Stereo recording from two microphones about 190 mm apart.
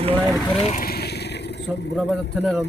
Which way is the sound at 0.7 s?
50° left (ahead or behind).